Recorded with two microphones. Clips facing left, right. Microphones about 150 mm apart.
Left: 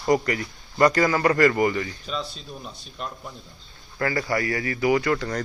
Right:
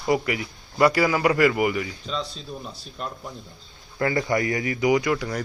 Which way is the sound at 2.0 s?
10° left (ahead or behind).